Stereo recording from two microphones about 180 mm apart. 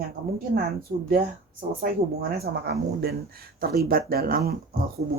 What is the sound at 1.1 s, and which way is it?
Speech, 55° right (ahead or behind).